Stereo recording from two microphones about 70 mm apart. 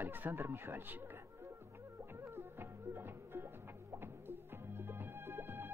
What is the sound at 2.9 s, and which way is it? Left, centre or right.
Speech, right.